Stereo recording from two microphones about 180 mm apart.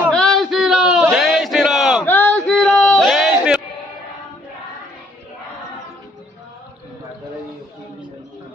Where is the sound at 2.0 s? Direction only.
10° left (ahead or behind).